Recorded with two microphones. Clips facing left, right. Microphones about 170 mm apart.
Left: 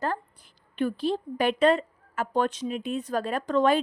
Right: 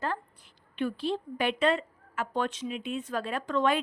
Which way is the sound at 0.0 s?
40° left (ahead or behind).